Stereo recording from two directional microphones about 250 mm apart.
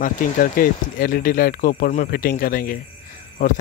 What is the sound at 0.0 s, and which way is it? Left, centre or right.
Speech, left.